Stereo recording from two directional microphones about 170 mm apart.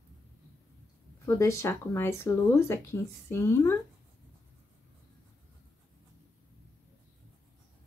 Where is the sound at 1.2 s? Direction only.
15° left (ahead or behind).